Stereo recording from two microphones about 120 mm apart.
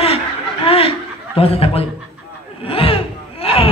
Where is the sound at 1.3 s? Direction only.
55° left (ahead or behind).